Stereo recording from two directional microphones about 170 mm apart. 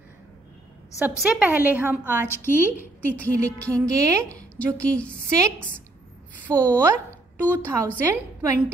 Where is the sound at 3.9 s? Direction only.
20° right (ahead or behind).